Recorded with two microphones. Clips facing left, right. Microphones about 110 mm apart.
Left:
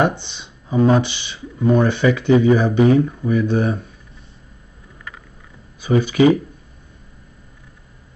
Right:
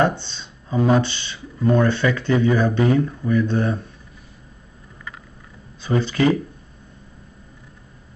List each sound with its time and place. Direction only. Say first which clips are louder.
0.2 s music: even; 15° left (ahead or behind)
0.9 s speech: left 1 dB; 15° left (ahead or behind)
5.8 s speech: left 5 dB; 10° left (ahead or behind)